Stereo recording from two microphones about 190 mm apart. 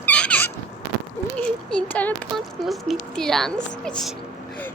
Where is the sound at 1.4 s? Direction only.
5° left (ahead or behind).